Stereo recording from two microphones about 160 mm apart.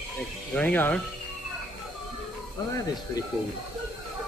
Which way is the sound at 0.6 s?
10° left (ahead or behind).